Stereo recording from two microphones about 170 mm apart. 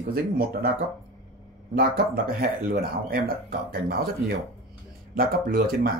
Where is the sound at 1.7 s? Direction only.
60° right (ahead or behind).